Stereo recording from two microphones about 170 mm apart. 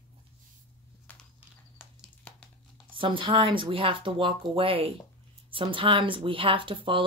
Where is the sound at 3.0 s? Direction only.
30° right (ahead or behind).